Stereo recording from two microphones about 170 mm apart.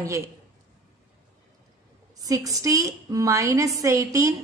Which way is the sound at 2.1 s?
20° right (ahead or behind).